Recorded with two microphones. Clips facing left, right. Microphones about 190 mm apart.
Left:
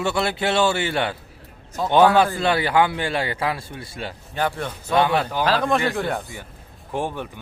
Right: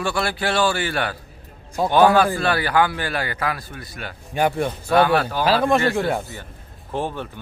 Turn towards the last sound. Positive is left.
turn(degrees=15)  # may be behind; listen again after turning